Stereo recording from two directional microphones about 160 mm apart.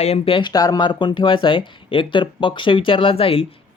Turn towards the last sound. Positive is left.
turn(degrees=35)  # may be behind; listen again after turning